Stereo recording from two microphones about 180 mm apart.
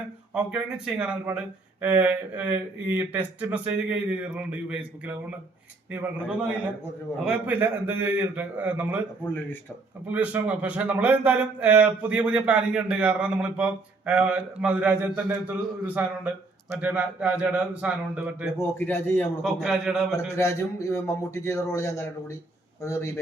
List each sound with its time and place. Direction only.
0.3 s a man's voice: 5° right (ahead or behind)
5.9 s a man's voice: 10° right (ahead or behind)
9.2 s a man's voice: 10° left (ahead or behind)
10.1 s a man's voice: 10° right (ahead or behind)
18.6 s a man's voice: 15° left (ahead or behind)
19.4 s a man's voice: 5° right (ahead or behind)
20.1 s a man's voice: 15° left (ahead or behind)